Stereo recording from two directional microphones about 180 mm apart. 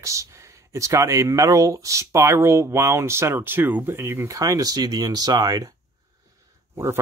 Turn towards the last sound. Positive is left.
turn(degrees=-15)  # may be behind; listen again after turning